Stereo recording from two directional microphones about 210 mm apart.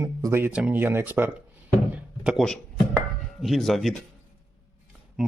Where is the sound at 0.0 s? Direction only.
15° right (ahead or behind).